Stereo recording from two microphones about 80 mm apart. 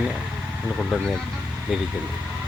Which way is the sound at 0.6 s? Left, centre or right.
Centre.